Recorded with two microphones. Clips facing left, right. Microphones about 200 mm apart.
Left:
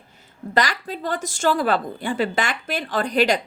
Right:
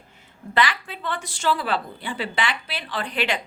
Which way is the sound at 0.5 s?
40° left (ahead or behind).